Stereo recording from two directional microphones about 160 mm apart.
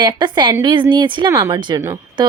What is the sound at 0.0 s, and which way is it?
Speech, 30° right (ahead or behind).